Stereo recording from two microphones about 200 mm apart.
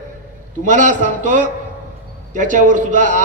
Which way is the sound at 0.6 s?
40° right (ahead or behind).